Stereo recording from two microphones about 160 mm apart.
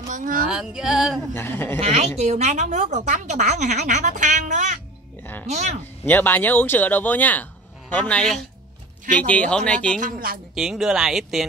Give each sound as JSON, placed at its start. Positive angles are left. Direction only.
{"t": 0.1, "sound": "speech", "side_deg": -60}
{"t": 0.5, "sound": "speech", "side_deg": -5}
{"t": 1.3, "sound": "speech", "side_deg": 15}
{"t": 1.8, "sound": "speech", "side_deg": -40}
{"t": 6.0, "sound": "speech", "side_deg": 10}
{"t": 9.9, "sound": "speech", "side_deg": -60}
{"t": 10.5, "sound": "speech", "side_deg": -5}